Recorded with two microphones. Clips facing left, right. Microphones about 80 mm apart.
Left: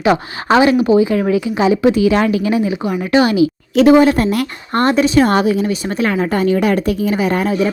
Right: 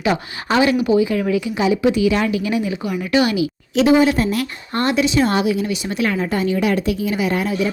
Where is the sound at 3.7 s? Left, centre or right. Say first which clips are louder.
Left 5 dB; left.